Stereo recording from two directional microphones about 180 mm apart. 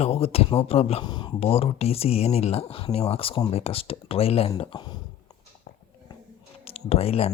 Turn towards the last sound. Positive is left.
turn(degrees=35)  # may be behind; listen again after turning